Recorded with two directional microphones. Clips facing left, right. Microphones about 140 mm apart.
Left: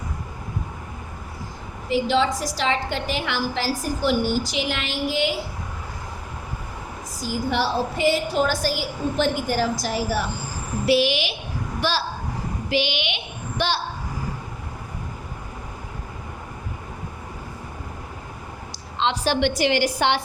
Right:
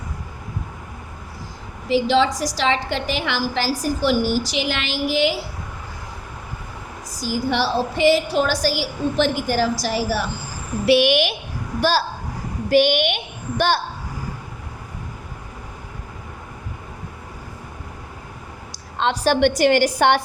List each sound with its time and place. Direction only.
1.9 s a woman's voice: 90° right
7.2 s a woman's voice: 90° right
10.8 s a woman's voice: 65° right (ahead or behind)
11.8 s a woman's voice: 40° right (ahead or behind)
18.9 s a woman's voice: 50° right (ahead or behind)